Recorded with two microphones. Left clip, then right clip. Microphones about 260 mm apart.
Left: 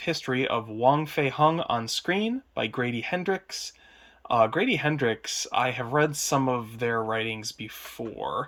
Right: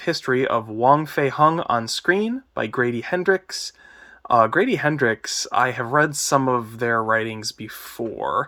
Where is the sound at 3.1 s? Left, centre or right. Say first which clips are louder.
Right 8 dB; centre.